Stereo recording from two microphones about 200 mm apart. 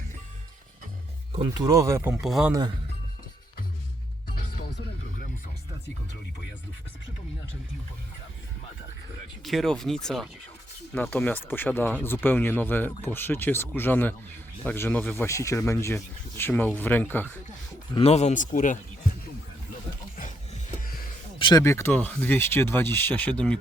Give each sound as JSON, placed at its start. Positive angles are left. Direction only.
{"t": 1.3, "sound": "speech", "side_deg": -20}
{"t": 2.2, "sound": "speech", "side_deg": 0}
{"t": 9.4, "sound": "speech", "side_deg": 0}
{"t": 17.9, "sound": "speech", "side_deg": 30}
{"t": 21.3, "sound": "a sound", "side_deg": 25}
{"t": 21.6, "sound": "speech", "side_deg": 15}